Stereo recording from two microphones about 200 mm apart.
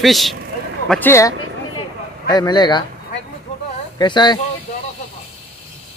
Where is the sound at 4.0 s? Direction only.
20° left (ahead or behind).